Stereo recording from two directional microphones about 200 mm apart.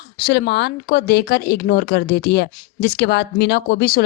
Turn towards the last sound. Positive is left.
turn(degrees=50)  # may be behind; listen again after turning